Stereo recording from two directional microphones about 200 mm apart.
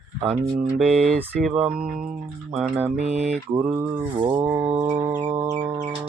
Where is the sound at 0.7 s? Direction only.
5° left (ahead or behind).